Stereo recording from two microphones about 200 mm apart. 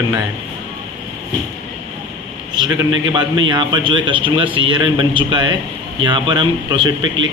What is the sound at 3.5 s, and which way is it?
A man's voice, 25° right (ahead or behind).